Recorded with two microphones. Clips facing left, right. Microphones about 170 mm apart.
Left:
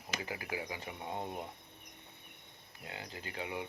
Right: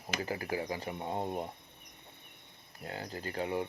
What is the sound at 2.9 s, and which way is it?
Speech, 40° right (ahead or behind).